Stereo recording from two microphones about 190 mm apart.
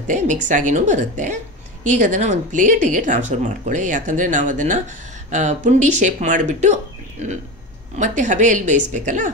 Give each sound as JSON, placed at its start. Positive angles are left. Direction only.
{"t": 0.0, "sound": "a woman's voice", "side_deg": -40}